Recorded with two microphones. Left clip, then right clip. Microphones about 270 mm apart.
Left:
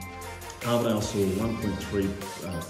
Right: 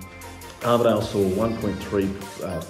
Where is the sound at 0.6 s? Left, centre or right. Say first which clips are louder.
Right 7 dB; centre.